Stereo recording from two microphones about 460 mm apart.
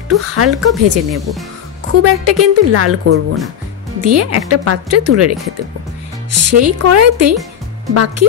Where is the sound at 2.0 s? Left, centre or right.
Right.